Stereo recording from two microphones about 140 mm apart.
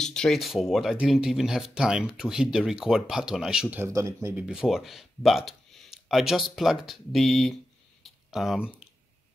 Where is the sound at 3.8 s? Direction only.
20° right (ahead or behind).